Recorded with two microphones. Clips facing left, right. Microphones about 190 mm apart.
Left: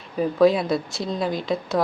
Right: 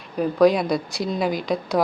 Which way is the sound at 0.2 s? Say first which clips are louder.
Right 1 dB; 5° left (ahead or behind).